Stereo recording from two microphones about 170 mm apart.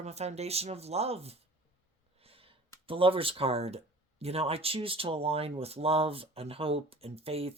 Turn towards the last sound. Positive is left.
turn(degrees=-35)  # may be behind; listen again after turning